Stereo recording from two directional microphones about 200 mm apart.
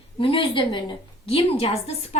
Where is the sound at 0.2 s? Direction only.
25° left (ahead or behind).